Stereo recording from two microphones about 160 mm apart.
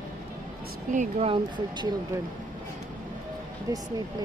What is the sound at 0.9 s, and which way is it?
Speech, 50° right (ahead or behind).